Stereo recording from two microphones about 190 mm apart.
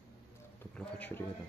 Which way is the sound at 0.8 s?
10° left (ahead or behind).